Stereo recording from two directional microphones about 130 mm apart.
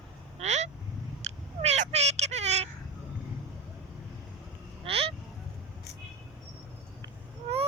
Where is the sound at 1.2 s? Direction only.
60° right (ahead or behind).